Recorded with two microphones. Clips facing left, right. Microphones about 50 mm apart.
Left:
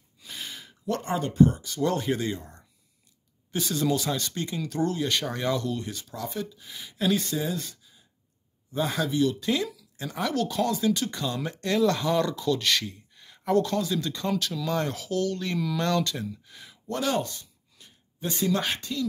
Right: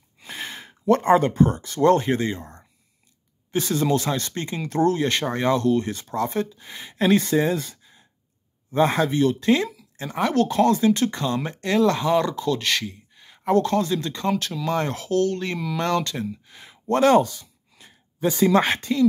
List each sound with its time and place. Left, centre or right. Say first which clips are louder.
0.2 s speech: right 6 dB; right
2.0 s speech: right 5 dB; right
3.8 s speech: right 1 dB; right
5.9 s speech: right 9 dB; right
7.7 s sigh: right 5 dB; right
8.7 s speech: right 6 dB; right
9.7 s speech: right 3 dB; right
16.8 s speech: right 11 dB; right
17.2 s speech: right 8 dB; right